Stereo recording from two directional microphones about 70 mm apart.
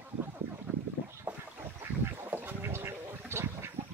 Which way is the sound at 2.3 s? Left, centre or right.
Right.